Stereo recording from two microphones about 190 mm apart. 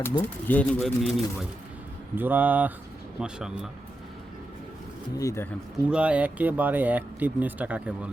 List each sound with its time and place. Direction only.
0.0 s speech: 10° left (ahead or behind)
5.1 s speech: 15° left (ahead or behind)
5.7 s speech: 5° right (ahead or behind)